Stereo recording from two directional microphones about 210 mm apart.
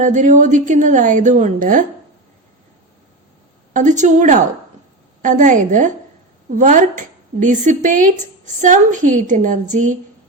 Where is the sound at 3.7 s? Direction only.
35° right (ahead or behind).